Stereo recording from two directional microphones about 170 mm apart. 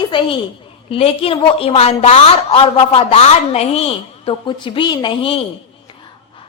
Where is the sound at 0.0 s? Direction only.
30° left (ahead or behind).